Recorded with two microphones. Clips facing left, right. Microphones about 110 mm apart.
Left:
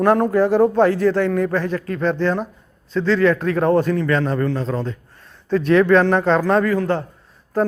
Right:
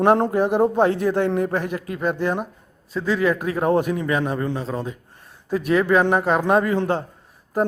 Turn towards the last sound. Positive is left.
turn(degrees=-10)  # may be behind; listen again after turning